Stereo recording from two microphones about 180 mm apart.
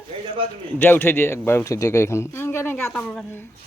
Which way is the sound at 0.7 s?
10° left (ahead or behind).